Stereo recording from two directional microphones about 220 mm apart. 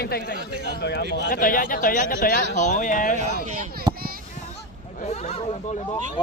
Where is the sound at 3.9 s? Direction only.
40° right (ahead or behind).